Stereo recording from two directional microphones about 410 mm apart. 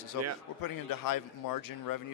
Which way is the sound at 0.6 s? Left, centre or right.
Left.